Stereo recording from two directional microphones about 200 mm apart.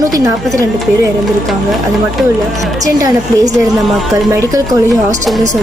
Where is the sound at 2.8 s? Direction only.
15° right (ahead or behind).